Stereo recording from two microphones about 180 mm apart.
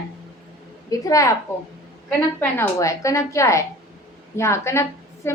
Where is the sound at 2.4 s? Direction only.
15° left (ahead or behind).